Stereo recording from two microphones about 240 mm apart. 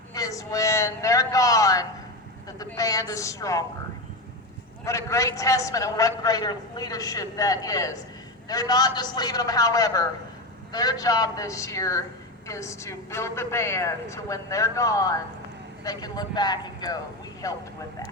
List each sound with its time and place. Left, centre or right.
0.1 s a sound: centre
2.6 s a woman's voice: centre
4.9 s a man's voice: centre